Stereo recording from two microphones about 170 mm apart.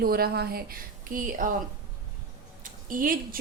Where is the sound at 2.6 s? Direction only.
55° right (ahead or behind).